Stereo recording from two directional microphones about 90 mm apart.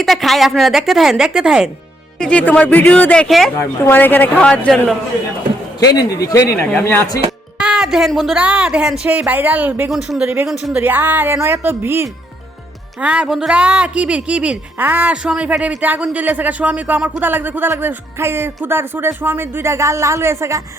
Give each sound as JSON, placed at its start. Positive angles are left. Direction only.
{"t": 0.0, "sound": "speech", "side_deg": 0}
{"t": 2.1, "sound": "speech", "side_deg": 10}
{"t": 3.2, "sound": "speech", "side_deg": 0}
{"t": 3.5, "sound": "a woman's voice", "side_deg": 30}
{"t": 5.9, "sound": "a man's voice", "side_deg": 45}
{"t": 6.8, "sound": "a woman's voice", "side_deg": 25}
{"t": 7.6, "sound": "a sound", "side_deg": -10}
{"t": 8.4, "sound": "speech", "side_deg": -10}
{"t": 9.9, "sound": "speech", "side_deg": -5}
{"t": 10.8, "sound": "speech", "side_deg": -20}
{"t": 13.0, "sound": "speech", "side_deg": -10}